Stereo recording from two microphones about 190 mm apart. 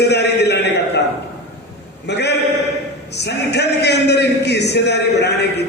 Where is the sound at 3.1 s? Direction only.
60° left (ahead or behind).